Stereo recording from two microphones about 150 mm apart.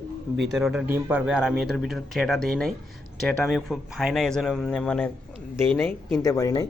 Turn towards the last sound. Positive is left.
turn(degrees=20)  # may be behind; listen again after turning